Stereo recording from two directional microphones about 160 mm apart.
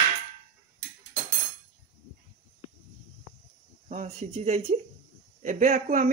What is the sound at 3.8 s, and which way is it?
Speech, 45° right (ahead or behind).